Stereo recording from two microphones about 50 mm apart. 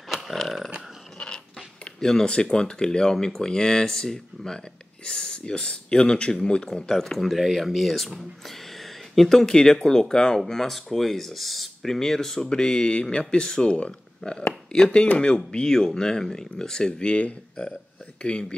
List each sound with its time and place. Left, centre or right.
0.4 s burping: centre
1.9 s speech: centre
6.7 s speech: centre